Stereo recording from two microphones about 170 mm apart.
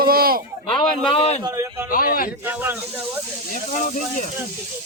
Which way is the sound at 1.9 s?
55° left (ahead or behind).